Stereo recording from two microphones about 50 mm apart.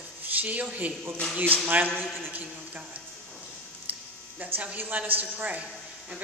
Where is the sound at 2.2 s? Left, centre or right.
Right.